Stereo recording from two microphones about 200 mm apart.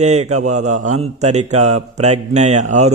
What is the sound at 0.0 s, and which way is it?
Speech, 35° right (ahead or behind).